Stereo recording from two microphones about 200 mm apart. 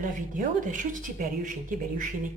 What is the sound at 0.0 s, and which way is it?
Speech, 40° right (ahead or behind).